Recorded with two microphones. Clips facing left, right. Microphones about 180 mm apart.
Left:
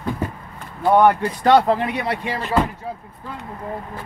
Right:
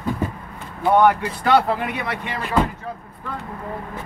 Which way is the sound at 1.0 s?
35° left (ahead or behind).